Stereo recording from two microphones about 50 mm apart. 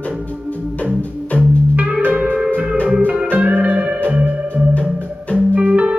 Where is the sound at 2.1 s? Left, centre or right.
Right.